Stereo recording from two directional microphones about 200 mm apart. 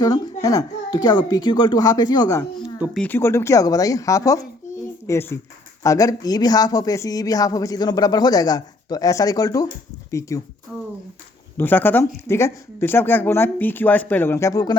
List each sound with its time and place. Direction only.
0.0 s speech: 15° left (ahead or behind)
2.8 s speech: 5° left (ahead or behind)
11.5 s speech: 10° left (ahead or behind)